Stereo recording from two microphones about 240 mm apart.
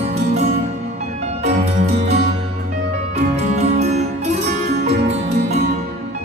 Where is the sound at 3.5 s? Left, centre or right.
Right.